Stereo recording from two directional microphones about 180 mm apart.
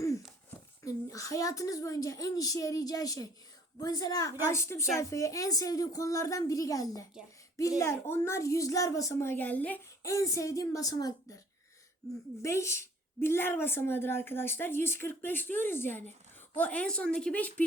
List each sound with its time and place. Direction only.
0.9 s a woman's voice: 20° left (ahead or behind)